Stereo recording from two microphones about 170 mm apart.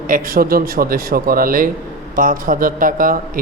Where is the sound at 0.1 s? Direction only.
60° right (ahead or behind).